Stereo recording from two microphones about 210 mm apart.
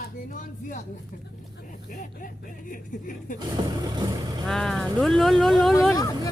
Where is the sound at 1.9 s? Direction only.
40° left (ahead or behind).